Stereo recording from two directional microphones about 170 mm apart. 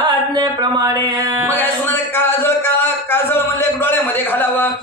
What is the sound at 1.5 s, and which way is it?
A man's voice, 10° left (ahead or behind).